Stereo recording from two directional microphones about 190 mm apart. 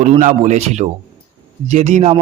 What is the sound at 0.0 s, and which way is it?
A man's voice, 40° right (ahead or behind).